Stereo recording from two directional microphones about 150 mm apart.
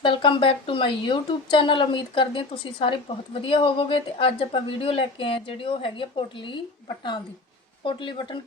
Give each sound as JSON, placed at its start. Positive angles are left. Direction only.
{"t": 0.0, "sound": "speech", "side_deg": 35}